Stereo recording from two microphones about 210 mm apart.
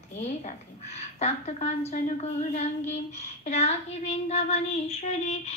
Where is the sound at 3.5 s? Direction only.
30° left (ahead or behind).